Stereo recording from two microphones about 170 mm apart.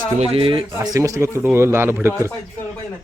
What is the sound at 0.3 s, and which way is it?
Speech, 30° right (ahead or behind).